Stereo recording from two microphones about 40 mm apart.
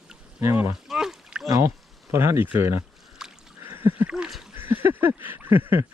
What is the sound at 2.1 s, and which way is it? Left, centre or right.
Speech, right.